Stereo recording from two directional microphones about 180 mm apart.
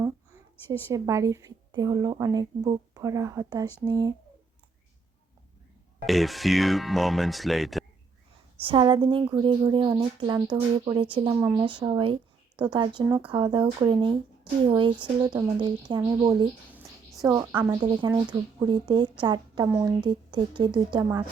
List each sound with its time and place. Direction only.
0.7 s a woman's voice: 20° right (ahead or behind)
6.1 s speech: centre (ahead or behind)
8.6 s a woman's voice: 25° right (ahead or behind)
11.3 s a woman's voice: 15° right (ahead or behind)
11.6 s a woman's voice: 25° right (ahead or behind)
17.8 s a woman's voice: 30° right (ahead or behind)